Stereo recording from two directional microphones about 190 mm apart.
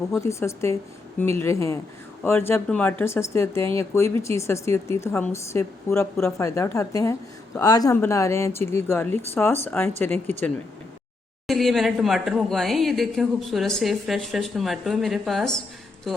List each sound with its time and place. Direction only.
0.2 s a woman's voice: 15° left (ahead or behind)
11.4 s speech: centre (ahead or behind)